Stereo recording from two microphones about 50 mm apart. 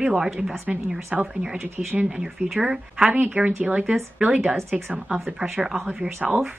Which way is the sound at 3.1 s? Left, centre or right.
Right.